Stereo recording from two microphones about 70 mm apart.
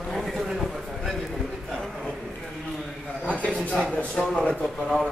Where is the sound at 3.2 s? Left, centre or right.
Centre.